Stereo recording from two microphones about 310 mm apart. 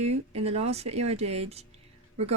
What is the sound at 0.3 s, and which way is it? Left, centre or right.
A woman's voice, centre.